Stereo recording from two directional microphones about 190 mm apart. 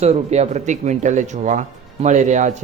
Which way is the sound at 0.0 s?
35° right (ahead or behind).